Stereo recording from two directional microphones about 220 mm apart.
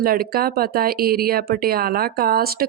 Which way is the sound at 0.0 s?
40° right (ahead or behind).